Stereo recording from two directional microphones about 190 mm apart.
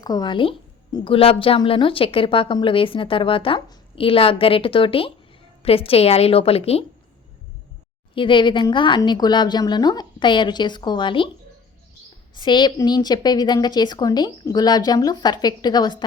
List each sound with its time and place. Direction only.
0.0 s a woman's voice: 20° left (ahead or behind)
8.1 s a woman's voice: 25° left (ahead or behind)
12.3 s a woman's voice: 25° left (ahead or behind)